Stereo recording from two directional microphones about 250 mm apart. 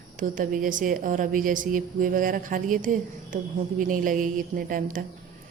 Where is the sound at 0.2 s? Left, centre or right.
Right.